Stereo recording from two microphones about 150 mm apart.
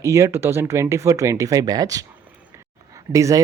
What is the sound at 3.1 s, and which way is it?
Speech, 20° right (ahead or behind).